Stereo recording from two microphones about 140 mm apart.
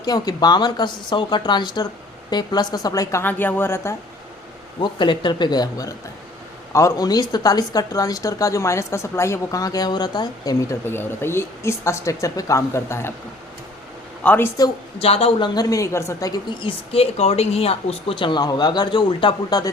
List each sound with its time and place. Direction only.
0.0 s a woman's voice: 30° left (ahead or behind)
4.8 s a woman's voice: 35° left (ahead or behind)
10.8 s speech: 15° left (ahead or behind)
14.3 s speech: 15° left (ahead or behind)
15.0 s a woman's voice: 45° left (ahead or behind); by 19.7 s 30° left (ahead or behind)